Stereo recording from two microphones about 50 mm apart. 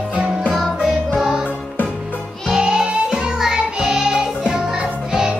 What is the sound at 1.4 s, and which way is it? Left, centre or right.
Music, left.